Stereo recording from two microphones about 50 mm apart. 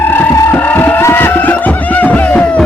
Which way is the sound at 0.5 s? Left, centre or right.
Left.